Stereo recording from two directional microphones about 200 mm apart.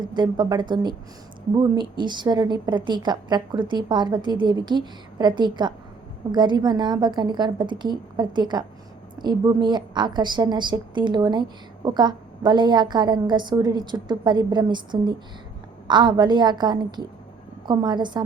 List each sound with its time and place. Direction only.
0.0 s a woman's voice: 20° right (ahead or behind)